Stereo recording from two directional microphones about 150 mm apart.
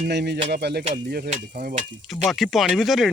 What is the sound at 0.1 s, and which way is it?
Speech, 90° right.